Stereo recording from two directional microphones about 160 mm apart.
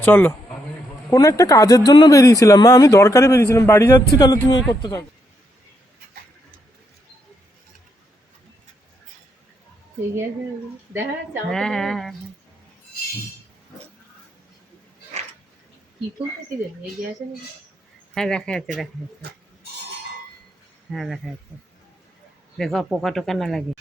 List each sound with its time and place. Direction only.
0.0 s speech: 10° left (ahead or behind)
11.5 s speech: 5° left (ahead or behind)
18.1 s speech: 5° left (ahead or behind)
20.9 s speech: centre (ahead or behind)
22.5 s speech: centre (ahead or behind)